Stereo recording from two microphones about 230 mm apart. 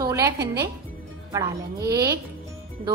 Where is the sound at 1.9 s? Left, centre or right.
Centre.